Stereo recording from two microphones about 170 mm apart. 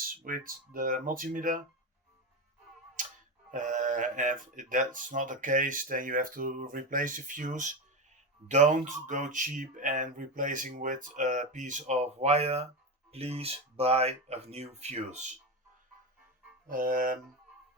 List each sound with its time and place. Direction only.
0.3 s speech: 55° right (ahead or behind)
3.0 s a sound: 50° right (ahead or behind)
3.5 s speech: 50° right (ahead or behind)
16.6 s music: 55° right (ahead or behind)